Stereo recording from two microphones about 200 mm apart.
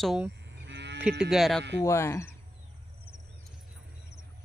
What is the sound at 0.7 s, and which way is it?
Cattle, 60° right (ahead or behind).